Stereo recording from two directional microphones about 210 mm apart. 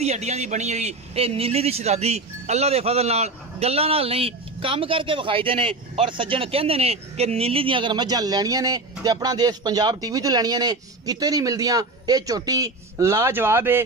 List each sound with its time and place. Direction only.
0.0 s a man's voice: 30° right (ahead or behind); by 13.8 s 10° right (ahead or behind)